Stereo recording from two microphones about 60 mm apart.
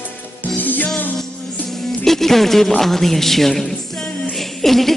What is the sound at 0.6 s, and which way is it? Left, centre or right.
Music, left.